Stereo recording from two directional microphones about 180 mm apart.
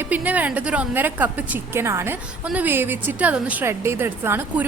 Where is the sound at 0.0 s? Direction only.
10° right (ahead or behind).